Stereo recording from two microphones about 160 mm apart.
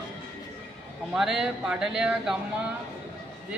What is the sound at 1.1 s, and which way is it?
Speech, centre (ahead or behind).